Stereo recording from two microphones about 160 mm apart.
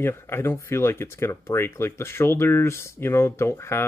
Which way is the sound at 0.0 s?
15° left (ahead or behind).